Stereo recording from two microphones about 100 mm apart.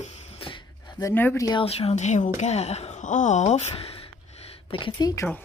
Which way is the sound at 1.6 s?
80° left.